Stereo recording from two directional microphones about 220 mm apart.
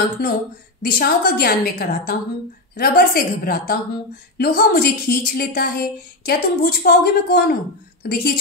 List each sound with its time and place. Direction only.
0.2 s a woman's voice: 45° left (ahead or behind)